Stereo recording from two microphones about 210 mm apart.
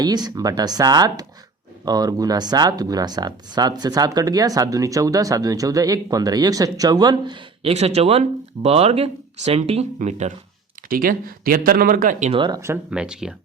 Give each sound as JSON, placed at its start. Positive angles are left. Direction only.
{"t": 0.0, "sound": "speech", "side_deg": -20}
{"t": 12.3, "sound": "speech", "side_deg": -20}